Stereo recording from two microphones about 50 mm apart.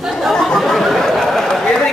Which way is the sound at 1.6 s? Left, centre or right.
Centre.